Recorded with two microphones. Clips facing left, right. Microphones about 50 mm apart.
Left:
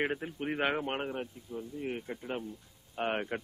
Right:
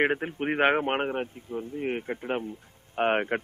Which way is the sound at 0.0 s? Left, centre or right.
Right.